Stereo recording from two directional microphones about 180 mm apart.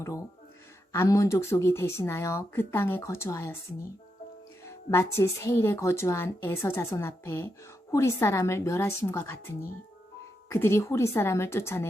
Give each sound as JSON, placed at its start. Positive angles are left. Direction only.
{"t": 0.0, "sound": "a woman's voice", "side_deg": 15}
{"t": 4.6, "sound": "a woman's voice", "side_deg": 15}
{"t": 10.5, "sound": "a woman's voice", "side_deg": 15}